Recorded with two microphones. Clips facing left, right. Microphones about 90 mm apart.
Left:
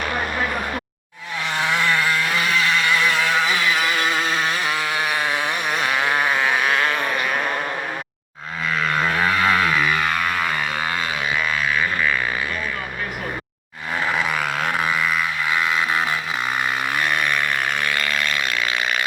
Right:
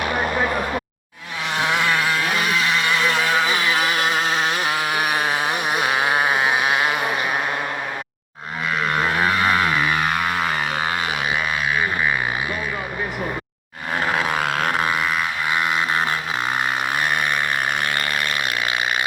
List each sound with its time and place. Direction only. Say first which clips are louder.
1.5 s vehicle: right 1 dB; 20° right (ahead or behind)
8.8 s vehicle: even; 20° right (ahead or behind)
13.9 s a sound: right 1 dB; 25° right (ahead or behind)